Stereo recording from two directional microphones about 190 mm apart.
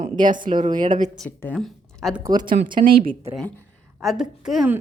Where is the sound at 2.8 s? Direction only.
50° right (ahead or behind).